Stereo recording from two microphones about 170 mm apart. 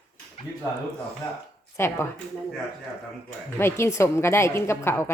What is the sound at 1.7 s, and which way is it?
Speech, 15° left (ahead or behind).